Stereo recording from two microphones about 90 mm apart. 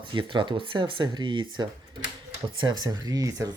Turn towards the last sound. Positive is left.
turn(degrees=-40)  # may be behind; listen again after turning